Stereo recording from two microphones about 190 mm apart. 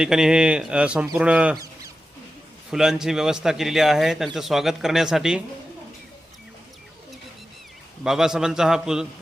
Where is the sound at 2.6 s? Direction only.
5° right (ahead or behind).